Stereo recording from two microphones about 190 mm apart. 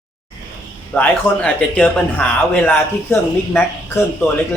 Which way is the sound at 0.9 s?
5° left (ahead or behind).